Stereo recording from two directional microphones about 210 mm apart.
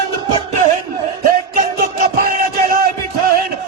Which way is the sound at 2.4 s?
45° right (ahead or behind).